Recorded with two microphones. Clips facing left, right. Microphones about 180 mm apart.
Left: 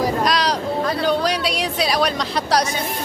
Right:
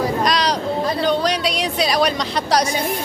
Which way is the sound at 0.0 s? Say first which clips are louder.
Even; 5° left (ahead or behind).